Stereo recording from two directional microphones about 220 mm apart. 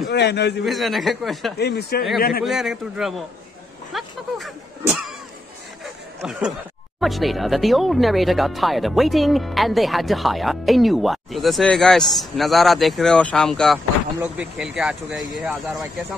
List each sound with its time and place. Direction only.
0.1 s speech: 50° left (ahead or behind)
0.7 s speech: centre (ahead or behind)
1.6 s speech: 45° left (ahead or behind)
2.4 s speech: centre (ahead or behind)
3.9 s a sound: centre (ahead or behind)
7.0 s speech: centre (ahead or behind)